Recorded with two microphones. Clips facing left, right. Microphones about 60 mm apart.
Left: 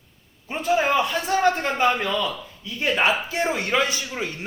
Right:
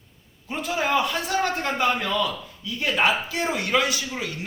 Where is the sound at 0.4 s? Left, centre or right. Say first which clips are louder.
Left 4 dB; left.